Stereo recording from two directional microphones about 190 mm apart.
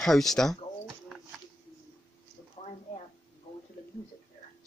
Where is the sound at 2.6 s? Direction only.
30° left (ahead or behind).